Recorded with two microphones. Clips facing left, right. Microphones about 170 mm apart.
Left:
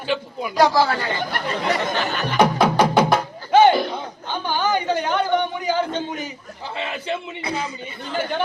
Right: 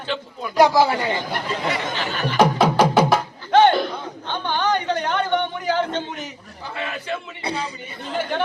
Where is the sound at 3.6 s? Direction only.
5° left (ahead or behind).